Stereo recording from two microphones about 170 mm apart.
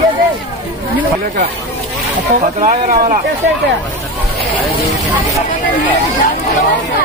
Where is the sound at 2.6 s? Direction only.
40° right (ahead or behind).